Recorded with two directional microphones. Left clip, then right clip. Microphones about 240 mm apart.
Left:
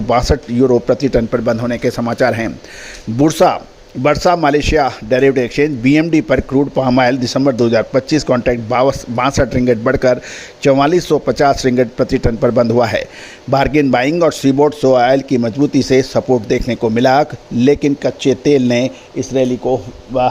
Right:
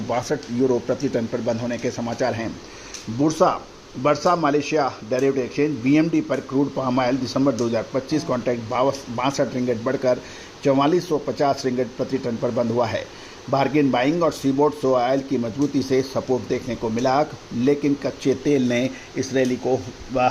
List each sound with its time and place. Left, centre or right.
0.1 s speech: left